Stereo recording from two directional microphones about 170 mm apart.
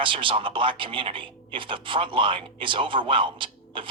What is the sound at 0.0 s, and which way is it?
Speech, 30° right (ahead or behind).